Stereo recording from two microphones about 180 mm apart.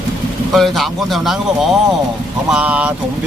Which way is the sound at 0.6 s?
Centre (ahead or behind).